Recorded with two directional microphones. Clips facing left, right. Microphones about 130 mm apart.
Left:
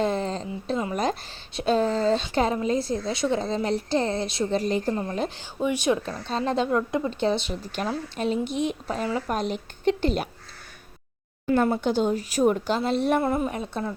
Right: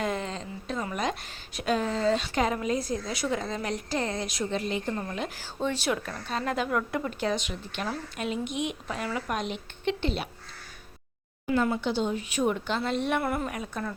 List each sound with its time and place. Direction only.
0.0 s a sound: 35° left (ahead or behind)
0.9 s a woman's voice: 35° left (ahead or behind)
5.5 s a woman's voice: 15° left (ahead or behind); by 10.2 s 40° left (ahead or behind)
11.4 s speech: 40° left (ahead or behind)
13.2 s a woman's voice: 25° left (ahead or behind)